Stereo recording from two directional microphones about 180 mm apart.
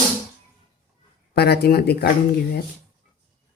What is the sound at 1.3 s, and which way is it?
Speech, 65° left (ahead or behind).